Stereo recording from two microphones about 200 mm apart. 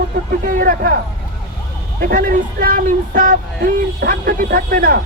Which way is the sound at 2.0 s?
45° right (ahead or behind).